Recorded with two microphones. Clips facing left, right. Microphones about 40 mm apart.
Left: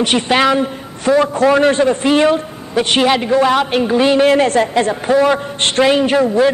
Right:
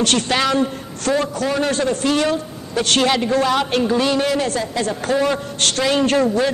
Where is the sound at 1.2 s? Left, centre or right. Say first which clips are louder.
Left 8 dB; left.